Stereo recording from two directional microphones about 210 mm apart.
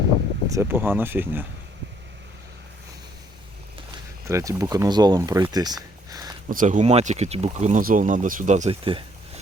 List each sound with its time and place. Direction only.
0.4 s speech: 15° right (ahead or behind)
4.3 s speech: 15° right (ahead or behind)
6.5 s speech: 35° right (ahead or behind)